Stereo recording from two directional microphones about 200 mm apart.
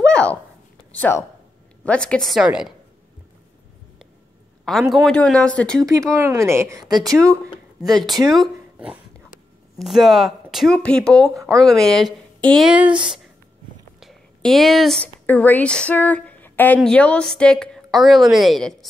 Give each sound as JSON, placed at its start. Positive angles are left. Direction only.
{"t": 0.0, "sound": "a sound", "side_deg": 5}
{"t": 0.9, "sound": "speech", "side_deg": 10}
{"t": 4.6, "sound": "speech", "side_deg": 0}
{"t": 5.8, "sound": "speech", "side_deg": -15}
{"t": 7.9, "sound": "speech", "side_deg": 0}